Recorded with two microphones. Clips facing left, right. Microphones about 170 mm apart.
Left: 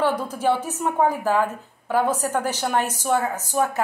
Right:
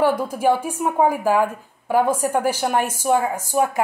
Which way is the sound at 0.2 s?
10° right (ahead or behind).